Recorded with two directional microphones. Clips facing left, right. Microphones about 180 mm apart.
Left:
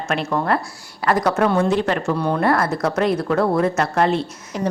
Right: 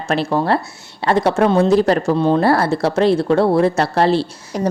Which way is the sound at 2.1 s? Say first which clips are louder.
Right 4 dB; 25° right (ahead or behind).